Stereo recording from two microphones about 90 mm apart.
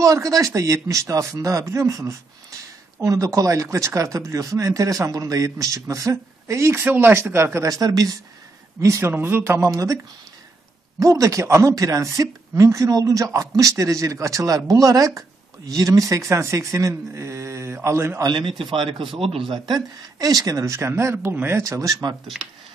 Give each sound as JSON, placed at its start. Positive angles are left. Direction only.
{"t": 0.0, "sound": "speech", "side_deg": -40}
{"t": 9.7, "sound": "speech", "side_deg": -40}
{"t": 11.0, "sound": "speech", "side_deg": -35}
{"t": 18.2, "sound": "speech", "side_deg": -55}
{"t": 18.6, "sound": "speech", "side_deg": -70}